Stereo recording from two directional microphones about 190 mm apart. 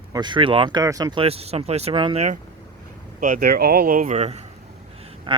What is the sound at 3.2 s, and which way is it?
Speech, 50° right (ahead or behind).